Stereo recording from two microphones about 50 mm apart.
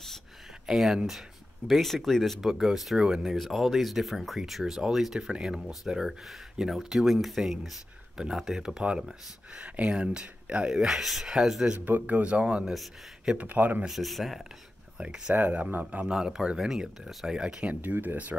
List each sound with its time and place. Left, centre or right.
0.7 s speech: centre
10.9 s speech: centre
11.8 s speech: right
12.6 s speech: centre
13.4 s speech: right
13.8 s speech: centre
15.0 s speech: centre
15.3 s speech: right
16.1 s speech: centre
17.9 s speech: right